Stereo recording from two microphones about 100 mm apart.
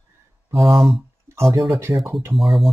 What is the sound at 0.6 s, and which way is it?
Speech, centre (ahead or behind).